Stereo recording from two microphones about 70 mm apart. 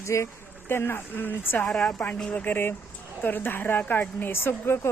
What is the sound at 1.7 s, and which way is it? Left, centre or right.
Speech, centre.